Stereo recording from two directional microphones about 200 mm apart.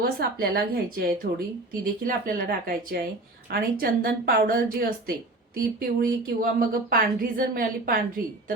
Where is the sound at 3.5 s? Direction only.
50° right (ahead or behind).